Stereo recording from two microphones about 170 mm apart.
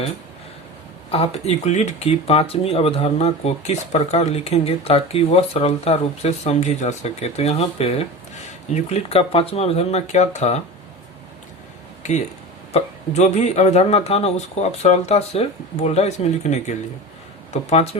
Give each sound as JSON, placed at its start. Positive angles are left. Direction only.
{"t": 1.1, "sound": "speech", "side_deg": 35}
{"t": 12.0, "sound": "speech", "side_deg": 45}